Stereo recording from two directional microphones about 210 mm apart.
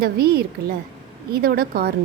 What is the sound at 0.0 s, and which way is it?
Speech, 50° right (ahead or behind).